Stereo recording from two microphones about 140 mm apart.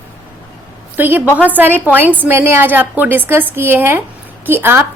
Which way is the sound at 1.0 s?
15° right (ahead or behind).